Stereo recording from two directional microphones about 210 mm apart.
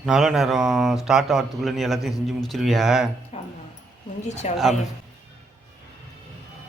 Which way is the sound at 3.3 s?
30° left (ahead or behind).